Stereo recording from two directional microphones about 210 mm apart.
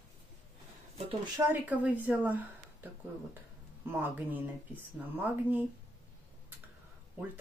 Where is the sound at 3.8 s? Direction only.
10° right (ahead or behind).